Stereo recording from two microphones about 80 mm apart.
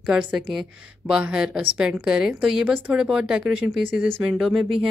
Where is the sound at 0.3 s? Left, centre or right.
Centre.